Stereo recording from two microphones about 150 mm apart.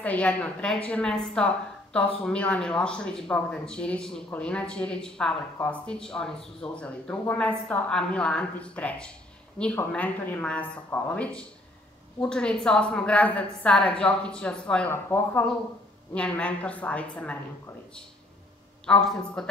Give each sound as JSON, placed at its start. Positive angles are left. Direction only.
{"t": 0.0, "sound": "a woman's voice", "side_deg": 10}
{"t": 18.9, "sound": "a man's voice", "side_deg": 5}